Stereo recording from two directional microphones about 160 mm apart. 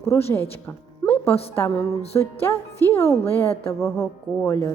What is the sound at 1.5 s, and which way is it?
Speech, 15° left (ahead or behind).